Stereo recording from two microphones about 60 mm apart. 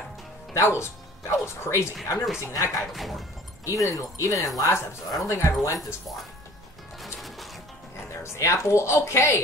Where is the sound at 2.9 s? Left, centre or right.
Centre.